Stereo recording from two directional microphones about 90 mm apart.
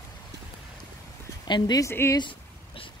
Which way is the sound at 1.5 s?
50° left (ahead or behind).